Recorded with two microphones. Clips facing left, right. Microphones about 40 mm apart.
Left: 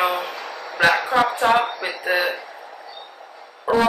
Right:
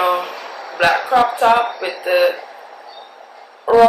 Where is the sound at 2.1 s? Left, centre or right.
Right.